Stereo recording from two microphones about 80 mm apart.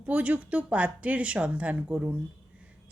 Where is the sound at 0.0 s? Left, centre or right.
Centre.